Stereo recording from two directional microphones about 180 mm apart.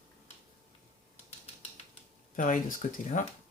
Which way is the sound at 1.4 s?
35° left (ahead or behind).